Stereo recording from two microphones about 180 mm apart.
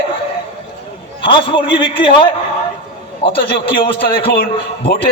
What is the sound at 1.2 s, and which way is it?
Speech, 30° left (ahead or behind).